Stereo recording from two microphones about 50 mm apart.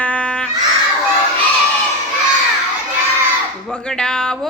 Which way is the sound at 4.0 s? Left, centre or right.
Centre.